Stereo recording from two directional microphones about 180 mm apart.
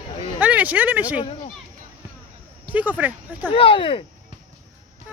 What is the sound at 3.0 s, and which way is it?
Speech, 10° right (ahead or behind).